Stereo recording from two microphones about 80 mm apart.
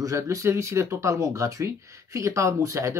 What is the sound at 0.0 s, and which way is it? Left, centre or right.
Speech, right.